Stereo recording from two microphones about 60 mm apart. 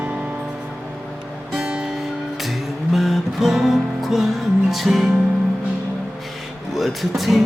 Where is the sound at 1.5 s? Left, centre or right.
Centre.